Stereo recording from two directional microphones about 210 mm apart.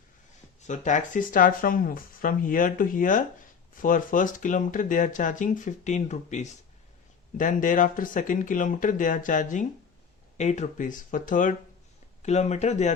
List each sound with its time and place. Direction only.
0.6 s speech: 35° left (ahead or behind)